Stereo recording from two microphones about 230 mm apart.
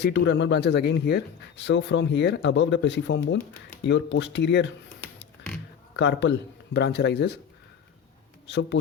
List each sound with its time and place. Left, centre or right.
0.0 s speech: left
6.0 s speech: left
8.4 s speech: left